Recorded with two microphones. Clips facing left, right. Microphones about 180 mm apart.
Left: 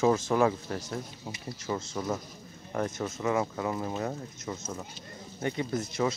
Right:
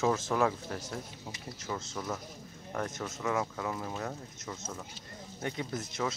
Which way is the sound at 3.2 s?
5° left (ahead or behind).